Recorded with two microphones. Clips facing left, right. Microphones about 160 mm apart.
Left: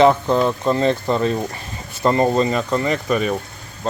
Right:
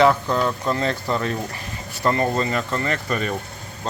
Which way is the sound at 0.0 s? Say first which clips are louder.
Left 3 dB; 20° left (ahead or behind).